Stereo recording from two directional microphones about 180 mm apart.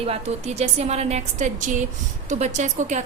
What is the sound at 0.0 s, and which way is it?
A woman's voice, 35° right (ahead or behind).